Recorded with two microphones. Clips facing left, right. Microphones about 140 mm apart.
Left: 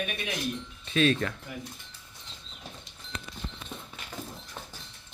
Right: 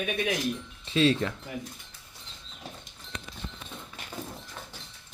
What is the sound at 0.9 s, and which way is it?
Speech, 25° right (ahead or behind).